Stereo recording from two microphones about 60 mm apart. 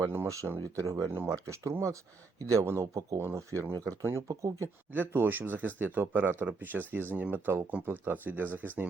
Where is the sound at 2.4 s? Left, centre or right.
Right.